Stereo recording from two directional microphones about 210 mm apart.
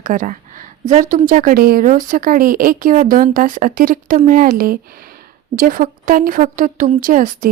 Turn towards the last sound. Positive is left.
turn(degrees=-40)  # may be behind; listen again after turning